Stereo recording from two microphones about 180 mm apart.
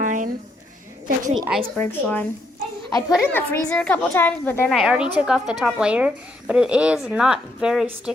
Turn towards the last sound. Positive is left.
turn(degrees=-5)  # may be behind; listen again after turning